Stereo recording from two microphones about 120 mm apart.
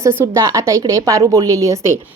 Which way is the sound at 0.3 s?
25° right (ahead or behind).